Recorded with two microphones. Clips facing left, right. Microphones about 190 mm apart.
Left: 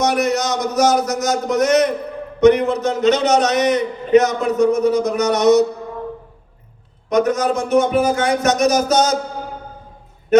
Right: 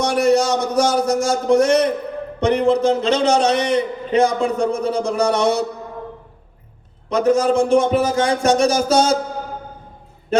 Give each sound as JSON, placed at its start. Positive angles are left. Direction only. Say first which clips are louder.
{"t": 0.1, "sound": "a sound", "louder": "right 3 dB", "side_deg": -30}
{"t": 2.4, "sound": "a man's voice", "louder": "left 3 dB", "side_deg": -30}
{"t": 7.1, "sound": "a man's voice", "louder": "right 1 dB", "side_deg": -30}